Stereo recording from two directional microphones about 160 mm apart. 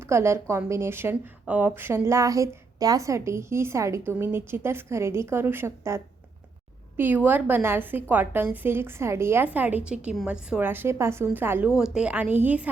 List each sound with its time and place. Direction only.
0.1 s a woman's voice: 15° right (ahead or behind)